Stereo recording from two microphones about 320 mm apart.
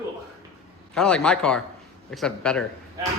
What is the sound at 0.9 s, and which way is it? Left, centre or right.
A man's voice, centre.